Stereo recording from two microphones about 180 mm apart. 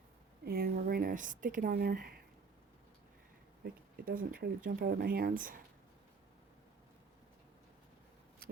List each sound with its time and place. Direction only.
0.4 s speech: 55° right (ahead or behind)
3.6 s speech: 55° right (ahead or behind)